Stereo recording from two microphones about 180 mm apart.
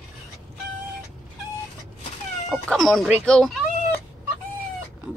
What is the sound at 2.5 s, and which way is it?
Speech, centre (ahead or behind).